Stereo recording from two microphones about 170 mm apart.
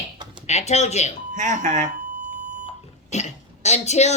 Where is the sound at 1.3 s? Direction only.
45° right (ahead or behind).